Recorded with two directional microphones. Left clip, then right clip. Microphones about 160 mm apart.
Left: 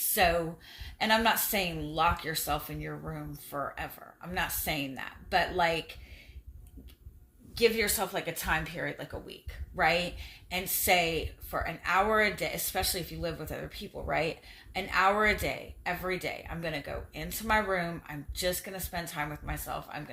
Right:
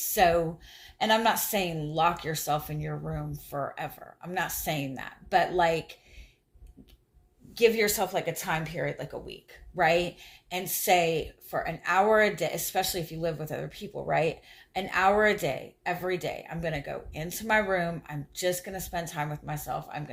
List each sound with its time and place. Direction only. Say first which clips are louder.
0.1 s a woman's voice: right 4 dB; 30° right (ahead or behind)
7.5 s a woman's voice: right 3 dB; 35° right (ahead or behind)